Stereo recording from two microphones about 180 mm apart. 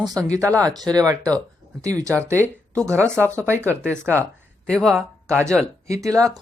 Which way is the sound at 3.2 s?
10° left (ahead or behind).